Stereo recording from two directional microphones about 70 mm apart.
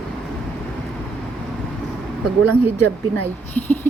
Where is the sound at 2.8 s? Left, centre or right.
Left.